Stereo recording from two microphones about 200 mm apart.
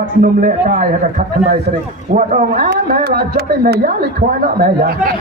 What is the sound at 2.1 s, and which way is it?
Speech, 40° right (ahead or behind).